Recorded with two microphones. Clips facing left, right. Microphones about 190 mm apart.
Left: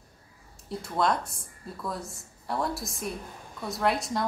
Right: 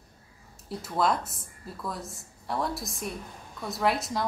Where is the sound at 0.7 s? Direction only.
Centre (ahead or behind).